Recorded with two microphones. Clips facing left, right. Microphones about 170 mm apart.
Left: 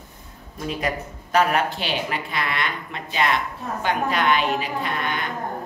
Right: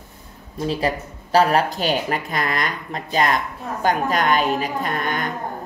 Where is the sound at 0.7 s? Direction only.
30° right (ahead or behind).